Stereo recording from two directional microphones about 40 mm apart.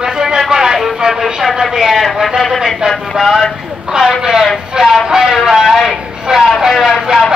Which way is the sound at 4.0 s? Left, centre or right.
Centre.